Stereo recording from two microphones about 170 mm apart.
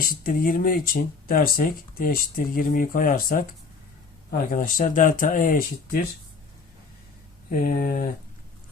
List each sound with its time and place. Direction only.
0.0 s speech: 55° left (ahead or behind)
7.8 s speech: 55° left (ahead or behind)